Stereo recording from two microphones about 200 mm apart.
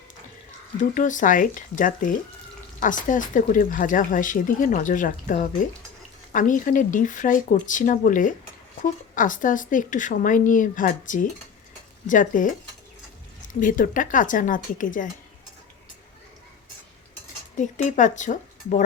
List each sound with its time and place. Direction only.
0.8 s speech: 40° left (ahead or behind)
17.6 s speech: 40° left (ahead or behind)